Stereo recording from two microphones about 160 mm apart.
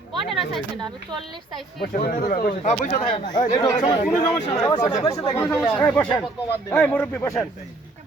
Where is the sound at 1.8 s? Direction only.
65° left (ahead or behind).